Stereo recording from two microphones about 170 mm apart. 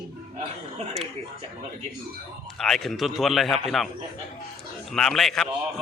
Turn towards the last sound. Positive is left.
turn(degrees=0)  # may be behind; listen again after turning